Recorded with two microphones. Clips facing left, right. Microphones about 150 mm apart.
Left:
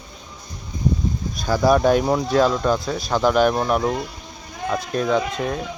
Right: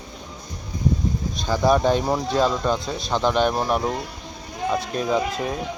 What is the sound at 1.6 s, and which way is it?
Speech, 5° left (ahead or behind).